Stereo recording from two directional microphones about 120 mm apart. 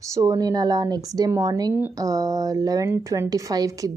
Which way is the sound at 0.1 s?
30° right (ahead or behind).